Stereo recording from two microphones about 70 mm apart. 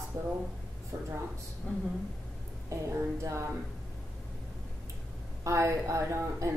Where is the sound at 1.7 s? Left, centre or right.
Centre.